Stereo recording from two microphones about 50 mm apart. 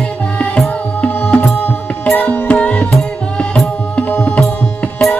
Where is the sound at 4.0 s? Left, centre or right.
Centre.